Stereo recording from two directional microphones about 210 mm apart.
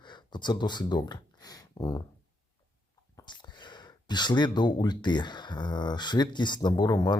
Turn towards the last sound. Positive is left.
turn(degrees=20)  # may be behind; listen again after turning